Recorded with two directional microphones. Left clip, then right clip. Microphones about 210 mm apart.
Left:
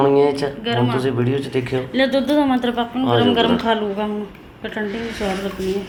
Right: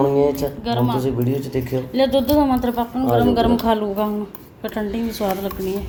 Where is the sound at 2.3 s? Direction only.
30° right (ahead or behind).